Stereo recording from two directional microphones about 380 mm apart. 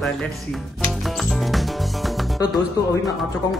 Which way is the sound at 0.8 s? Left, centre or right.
Centre.